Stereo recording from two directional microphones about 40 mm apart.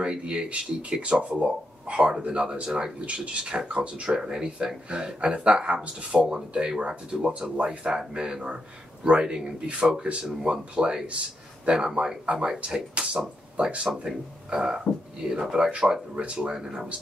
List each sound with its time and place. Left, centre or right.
0.0 s speech: right
14.1 s speech: centre
14.5 s speech: right